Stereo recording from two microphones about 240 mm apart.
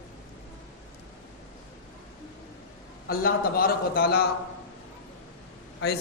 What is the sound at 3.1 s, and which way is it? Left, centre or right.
A man's voice, left.